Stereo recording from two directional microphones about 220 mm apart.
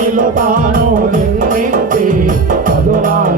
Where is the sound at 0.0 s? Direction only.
35° right (ahead or behind).